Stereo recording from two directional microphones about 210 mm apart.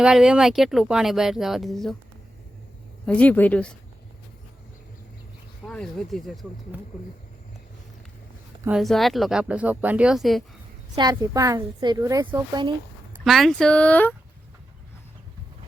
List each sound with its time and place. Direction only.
0.0 s speech: 5° right (ahead or behind)
3.1 s speech: 5° left (ahead or behind)
5.6 s speech: 5° left (ahead or behind)
8.6 s speech: centre (ahead or behind)
10.9 s a woman's voice: 20° right (ahead or behind)
13.2 s speech: centre (ahead or behind)